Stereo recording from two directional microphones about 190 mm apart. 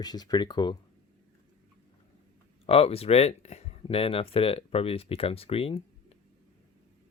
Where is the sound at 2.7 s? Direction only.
30° left (ahead or behind).